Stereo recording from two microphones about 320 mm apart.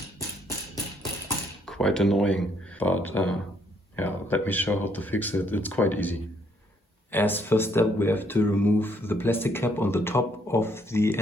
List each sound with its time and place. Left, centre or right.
1.6 s speech: centre